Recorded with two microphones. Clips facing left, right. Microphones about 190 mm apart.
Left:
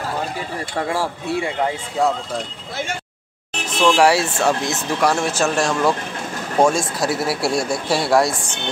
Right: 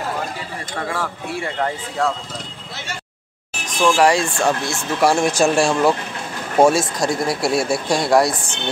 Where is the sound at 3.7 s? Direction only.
10° right (ahead or behind).